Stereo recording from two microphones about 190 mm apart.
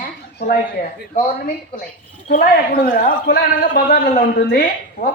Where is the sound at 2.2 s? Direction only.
45° left (ahead or behind).